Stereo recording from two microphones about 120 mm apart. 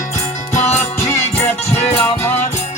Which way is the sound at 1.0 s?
25° left (ahead or behind).